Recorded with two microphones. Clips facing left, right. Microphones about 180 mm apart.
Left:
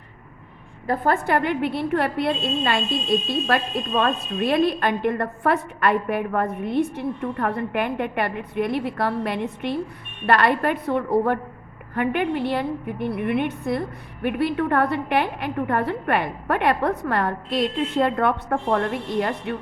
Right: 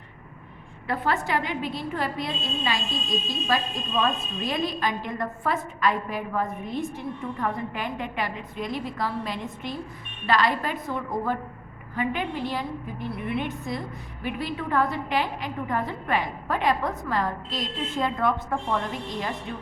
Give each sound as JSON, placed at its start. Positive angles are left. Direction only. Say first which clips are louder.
{"t": 0.9, "sound": "a woman's voice", "louder": "left 5 dB", "side_deg": 50}